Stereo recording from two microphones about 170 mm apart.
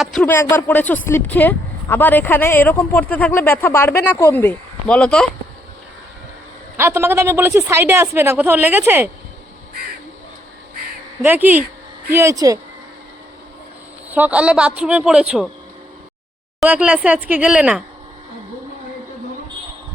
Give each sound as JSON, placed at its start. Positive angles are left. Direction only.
{"t": 0.0, "sound": "a woman's voice", "side_deg": 5}
{"t": 6.7, "sound": "speech", "side_deg": -15}
{"t": 11.2, "sound": "speech", "side_deg": -10}
{"t": 14.1, "sound": "speech", "side_deg": -10}
{"t": 16.6, "sound": "speech", "side_deg": -5}